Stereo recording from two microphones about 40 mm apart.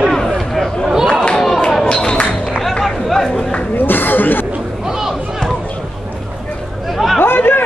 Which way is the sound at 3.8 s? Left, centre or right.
Left.